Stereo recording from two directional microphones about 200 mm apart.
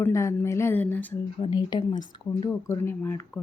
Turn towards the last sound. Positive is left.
turn(degrees=10)  # may be behind; listen again after turning